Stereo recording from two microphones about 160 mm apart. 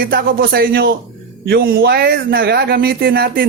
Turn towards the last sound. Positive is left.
turn(degrees=-70)  # may be behind; listen again after turning